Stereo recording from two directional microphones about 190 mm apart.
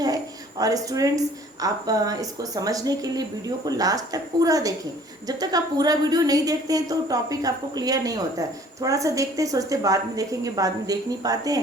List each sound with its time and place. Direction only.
0.6 s speech: 20° right (ahead or behind)